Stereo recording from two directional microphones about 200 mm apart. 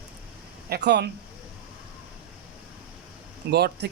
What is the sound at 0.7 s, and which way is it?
Speech, 55° right (ahead or behind).